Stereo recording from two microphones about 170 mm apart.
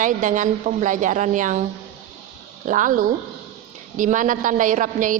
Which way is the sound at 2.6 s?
50° right (ahead or behind).